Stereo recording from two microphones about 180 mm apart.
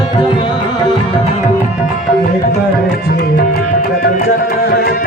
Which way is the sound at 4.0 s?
55° left (ahead or behind).